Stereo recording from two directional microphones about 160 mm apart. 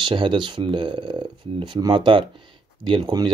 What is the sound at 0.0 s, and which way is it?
Speech, 30° right (ahead or behind).